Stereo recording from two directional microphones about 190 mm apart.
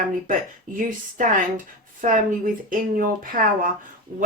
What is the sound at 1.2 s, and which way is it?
A woman's voice, 45° right (ahead or behind).